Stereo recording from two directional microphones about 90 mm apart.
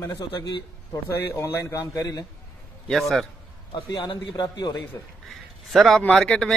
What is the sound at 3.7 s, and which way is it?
A man's voice, 65° left (ahead or behind).